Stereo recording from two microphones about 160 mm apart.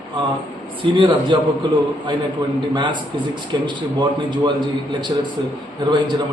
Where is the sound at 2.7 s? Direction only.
30° right (ahead or behind).